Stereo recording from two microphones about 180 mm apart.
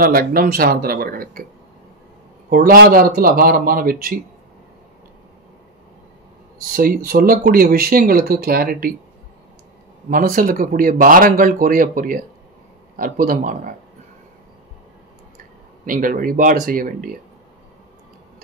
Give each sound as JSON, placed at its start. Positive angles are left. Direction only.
{"t": 0.0, "sound": "speech", "side_deg": -55}
{"t": 2.5, "sound": "speech", "side_deg": -55}
{"t": 6.6, "sound": "speech", "side_deg": -50}
{"t": 10.0, "sound": "speech", "side_deg": -50}
{"t": 15.8, "sound": "speech", "side_deg": -50}